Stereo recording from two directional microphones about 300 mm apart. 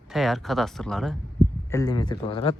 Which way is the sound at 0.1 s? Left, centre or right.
Centre.